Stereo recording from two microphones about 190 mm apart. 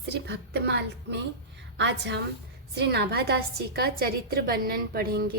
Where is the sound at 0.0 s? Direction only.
60° right (ahead or behind).